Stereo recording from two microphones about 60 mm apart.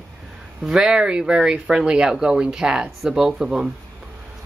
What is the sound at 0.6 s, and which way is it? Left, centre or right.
Speech, centre.